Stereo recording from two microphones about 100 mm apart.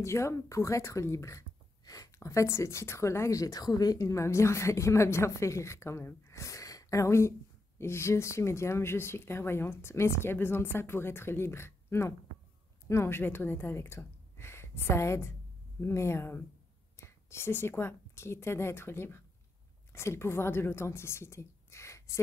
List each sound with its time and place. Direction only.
0.0 s a woman's voice: 30° left (ahead or behind)